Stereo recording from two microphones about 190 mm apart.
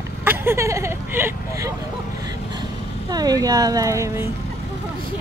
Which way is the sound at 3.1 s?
20° right (ahead or behind).